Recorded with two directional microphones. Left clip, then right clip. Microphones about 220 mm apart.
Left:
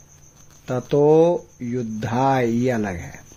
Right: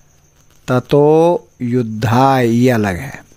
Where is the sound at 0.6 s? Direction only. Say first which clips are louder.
Right 6 dB; 45° right (ahead or behind).